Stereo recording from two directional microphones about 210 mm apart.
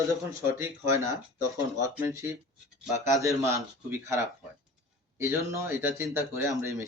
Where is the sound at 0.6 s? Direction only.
15° right (ahead or behind).